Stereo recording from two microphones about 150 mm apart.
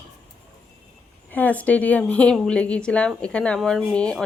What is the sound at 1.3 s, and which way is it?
Speech, 10° left (ahead or behind).